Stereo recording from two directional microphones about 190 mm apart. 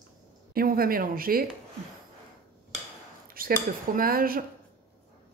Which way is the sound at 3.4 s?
50° right (ahead or behind).